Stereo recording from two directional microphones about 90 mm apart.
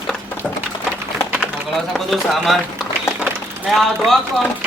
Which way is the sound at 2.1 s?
Centre (ahead or behind).